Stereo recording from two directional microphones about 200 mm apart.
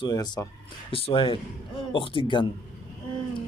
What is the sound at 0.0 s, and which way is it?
Speech, 20° left (ahead or behind).